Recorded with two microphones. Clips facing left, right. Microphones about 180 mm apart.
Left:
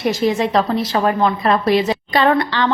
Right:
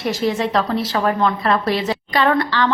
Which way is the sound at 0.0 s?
15° left (ahead or behind).